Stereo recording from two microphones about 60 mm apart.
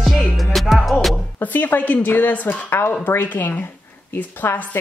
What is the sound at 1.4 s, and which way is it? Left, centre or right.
Speech, left.